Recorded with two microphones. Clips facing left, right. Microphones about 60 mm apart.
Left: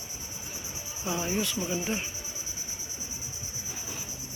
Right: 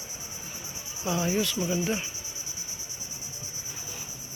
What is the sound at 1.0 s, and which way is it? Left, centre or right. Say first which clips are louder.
Speech: right 3 dB; centre.